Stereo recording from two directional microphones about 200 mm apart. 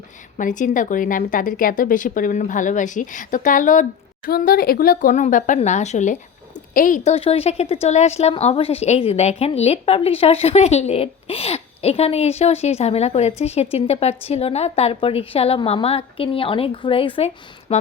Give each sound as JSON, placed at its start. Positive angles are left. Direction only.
{"t": 0.3, "sound": "speech", "side_deg": 40}